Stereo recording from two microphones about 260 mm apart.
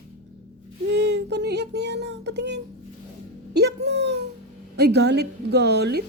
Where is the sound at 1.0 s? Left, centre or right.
Right.